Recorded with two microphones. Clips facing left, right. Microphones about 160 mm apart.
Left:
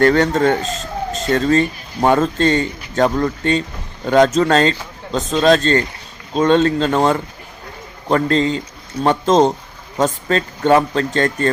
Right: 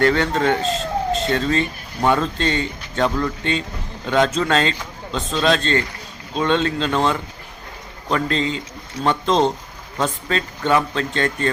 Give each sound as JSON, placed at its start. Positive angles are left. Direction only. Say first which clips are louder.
{"t": 0.0, "sound": "speech", "louder": "left 4 dB", "side_deg": 45}